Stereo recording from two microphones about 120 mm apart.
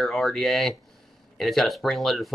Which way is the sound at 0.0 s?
Centre (ahead or behind).